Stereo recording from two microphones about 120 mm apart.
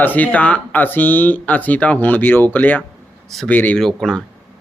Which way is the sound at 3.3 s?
Centre (ahead or behind).